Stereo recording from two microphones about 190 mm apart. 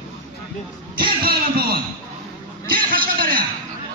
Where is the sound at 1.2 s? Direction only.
55° right (ahead or behind).